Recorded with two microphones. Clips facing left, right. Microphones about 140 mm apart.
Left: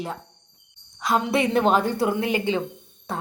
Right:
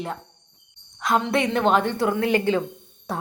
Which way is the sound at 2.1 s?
20° left (ahead or behind).